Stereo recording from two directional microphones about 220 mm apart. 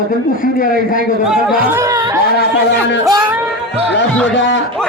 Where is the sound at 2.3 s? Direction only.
50° left (ahead or behind).